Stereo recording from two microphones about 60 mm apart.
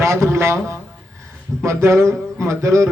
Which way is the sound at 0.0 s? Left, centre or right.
Right.